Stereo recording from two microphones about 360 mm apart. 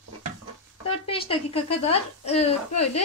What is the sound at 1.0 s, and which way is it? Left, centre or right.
Speech, centre.